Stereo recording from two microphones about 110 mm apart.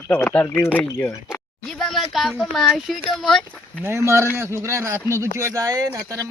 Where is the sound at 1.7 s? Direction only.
Centre (ahead or behind).